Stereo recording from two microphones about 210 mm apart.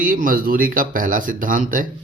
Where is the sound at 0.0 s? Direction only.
40° right (ahead or behind).